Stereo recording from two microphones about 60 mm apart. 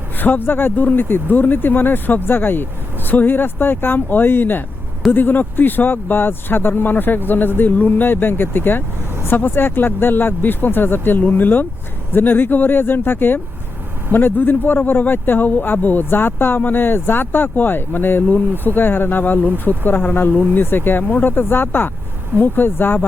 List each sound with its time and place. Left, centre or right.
0.2 s speech: left